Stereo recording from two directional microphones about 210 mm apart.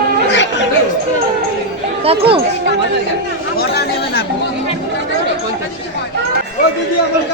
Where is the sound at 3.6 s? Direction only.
50° left (ahead or behind).